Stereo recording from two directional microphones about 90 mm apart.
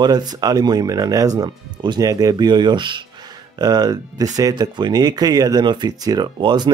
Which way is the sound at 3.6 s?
50° right (ahead or behind).